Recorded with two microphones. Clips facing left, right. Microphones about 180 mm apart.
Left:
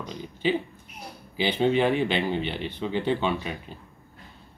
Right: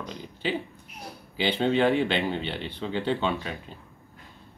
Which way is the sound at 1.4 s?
10° left (ahead or behind).